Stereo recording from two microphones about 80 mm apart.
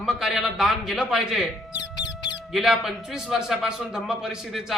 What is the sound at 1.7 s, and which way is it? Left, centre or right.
Mouse, left.